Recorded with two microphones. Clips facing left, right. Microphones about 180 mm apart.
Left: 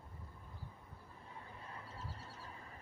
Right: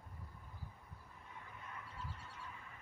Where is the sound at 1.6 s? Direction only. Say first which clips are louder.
Right 1 dB; 30° left (ahead or behind).